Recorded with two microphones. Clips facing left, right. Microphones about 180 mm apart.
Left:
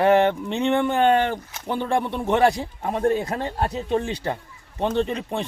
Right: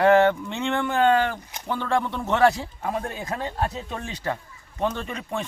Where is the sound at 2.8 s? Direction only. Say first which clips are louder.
Left 8 dB; 25° left (ahead or behind).